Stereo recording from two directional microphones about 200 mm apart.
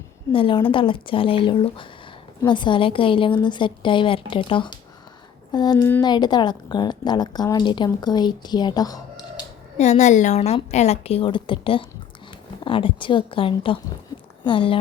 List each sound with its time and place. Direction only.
0.3 s a woman's voice: 25° left (ahead or behind)
9.7 s a woman's voice: 35° left (ahead or behind)